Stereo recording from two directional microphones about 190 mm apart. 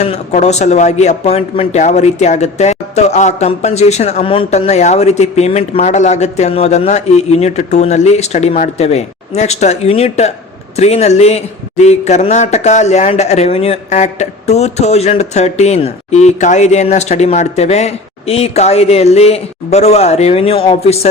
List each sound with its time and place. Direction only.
0.0 s speech: 35° left (ahead or behind)